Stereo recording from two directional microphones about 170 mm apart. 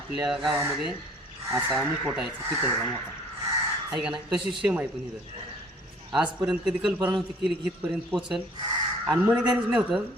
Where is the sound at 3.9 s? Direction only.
5° right (ahead or behind).